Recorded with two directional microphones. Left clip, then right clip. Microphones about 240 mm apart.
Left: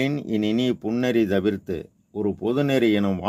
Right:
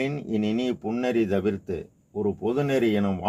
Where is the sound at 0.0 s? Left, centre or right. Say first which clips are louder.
Left 3 dB; left.